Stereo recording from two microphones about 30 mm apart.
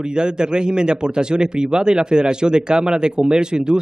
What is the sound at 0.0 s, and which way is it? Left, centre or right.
Speech, right.